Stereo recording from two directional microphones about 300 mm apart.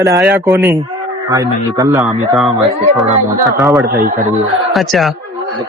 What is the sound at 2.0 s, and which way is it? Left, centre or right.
Speech, centre.